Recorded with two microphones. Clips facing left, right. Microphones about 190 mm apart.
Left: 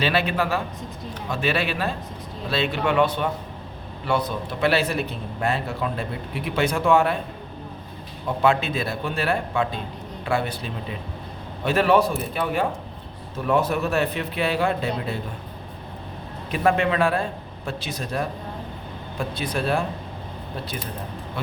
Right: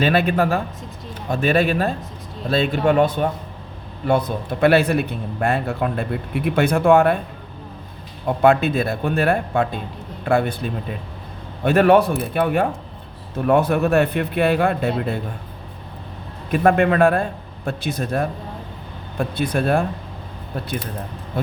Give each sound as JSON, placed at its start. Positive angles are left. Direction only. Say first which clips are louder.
{"t": 0.0, "sound": "speech", "louder": "right 5 dB", "side_deg": -50}
{"t": 4.6, "sound": "a man's voice", "louder": "right 6 dB", "side_deg": -55}
{"t": 8.4, "sound": "a man's voice", "louder": "right 5 dB", "side_deg": -55}
{"t": 16.5, "sound": "speech", "louder": "right 5 dB", "side_deg": -50}
{"t": 19.4, "sound": "a man's voice", "louder": "right 5 dB", "side_deg": -55}